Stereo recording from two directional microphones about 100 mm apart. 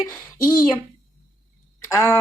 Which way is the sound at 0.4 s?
40° left (ahead or behind).